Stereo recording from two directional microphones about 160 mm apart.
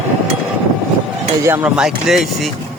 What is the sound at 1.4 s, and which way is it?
Speech, 10° right (ahead or behind).